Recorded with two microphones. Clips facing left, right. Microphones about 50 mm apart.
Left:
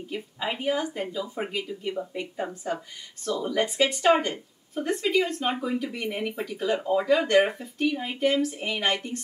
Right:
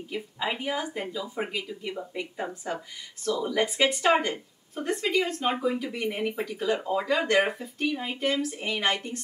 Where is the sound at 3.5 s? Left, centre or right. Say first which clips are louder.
Left 1 dB; centre.